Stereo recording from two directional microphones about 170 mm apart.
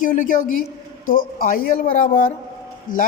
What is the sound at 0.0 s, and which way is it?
Speech, 50° left (ahead or behind).